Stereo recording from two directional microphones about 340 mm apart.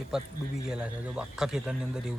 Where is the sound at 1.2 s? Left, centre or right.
Centre.